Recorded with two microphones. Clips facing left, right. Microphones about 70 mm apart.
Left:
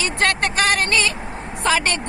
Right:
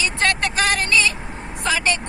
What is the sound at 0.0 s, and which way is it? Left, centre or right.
Vehicle, left.